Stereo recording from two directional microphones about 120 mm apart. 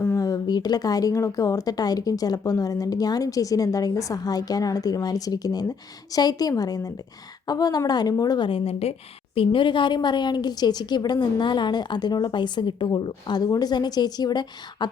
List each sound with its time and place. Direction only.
0.2 s speech: 30° left (ahead or behind)
8.4 s speech: 50° left (ahead or behind); by 14.8 s 35° left (ahead or behind)